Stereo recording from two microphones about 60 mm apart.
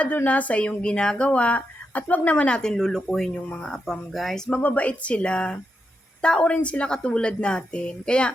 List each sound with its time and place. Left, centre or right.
0.3 s speech: left
2.6 s a woman's voice: centre
4.4 s a woman's voice: left